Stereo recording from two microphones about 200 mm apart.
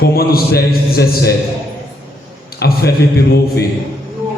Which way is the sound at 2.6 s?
50° left (ahead or behind).